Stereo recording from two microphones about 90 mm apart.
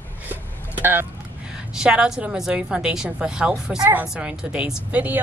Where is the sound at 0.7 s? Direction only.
25° right (ahead or behind).